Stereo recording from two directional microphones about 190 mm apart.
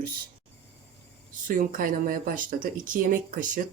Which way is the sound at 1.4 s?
45° right (ahead or behind).